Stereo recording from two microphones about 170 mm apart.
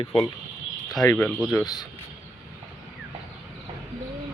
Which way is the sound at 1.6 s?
25° left (ahead or behind).